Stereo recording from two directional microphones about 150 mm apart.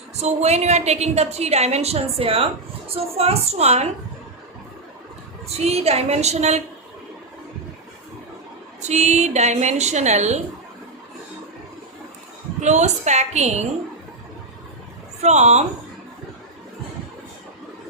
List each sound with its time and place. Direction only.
0.2 s a woman's voice: 45° right (ahead or behind)
5.5 s a woman's voice: 45° right (ahead or behind)
8.8 s a woman's voice: 50° right (ahead or behind)
12.5 s a woman's voice: 50° right (ahead or behind)
15.2 s a woman's voice: 50° right (ahead or behind)